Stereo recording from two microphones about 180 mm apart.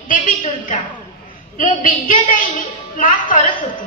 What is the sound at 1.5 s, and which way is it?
A woman's voice, 50° left (ahead or behind).